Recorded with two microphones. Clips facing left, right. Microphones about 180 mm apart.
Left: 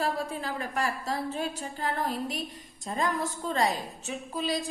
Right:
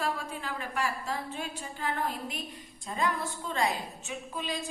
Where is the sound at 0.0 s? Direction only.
35° left (ahead or behind).